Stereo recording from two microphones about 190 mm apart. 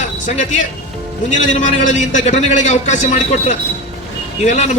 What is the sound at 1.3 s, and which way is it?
A man's voice, 40° left (ahead or behind).